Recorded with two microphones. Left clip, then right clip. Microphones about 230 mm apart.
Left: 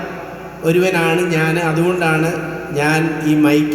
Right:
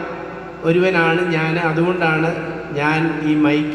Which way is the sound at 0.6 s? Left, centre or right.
Left.